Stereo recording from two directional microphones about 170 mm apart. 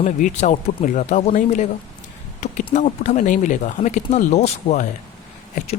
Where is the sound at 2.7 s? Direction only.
45° left (ahead or behind).